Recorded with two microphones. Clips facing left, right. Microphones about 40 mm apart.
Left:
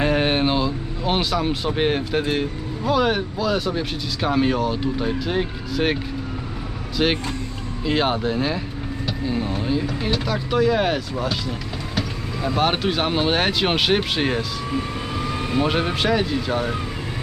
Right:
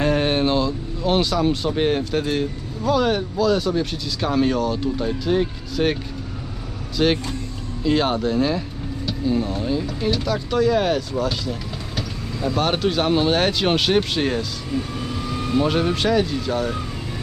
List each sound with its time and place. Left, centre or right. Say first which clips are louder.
0.0 s speech: even; centre